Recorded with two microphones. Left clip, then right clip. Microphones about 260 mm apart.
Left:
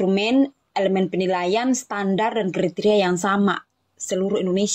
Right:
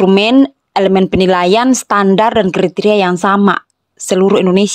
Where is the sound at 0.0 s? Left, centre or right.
Right.